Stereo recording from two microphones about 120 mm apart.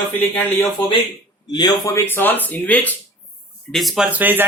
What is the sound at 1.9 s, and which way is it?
Speech, 15° left (ahead or behind).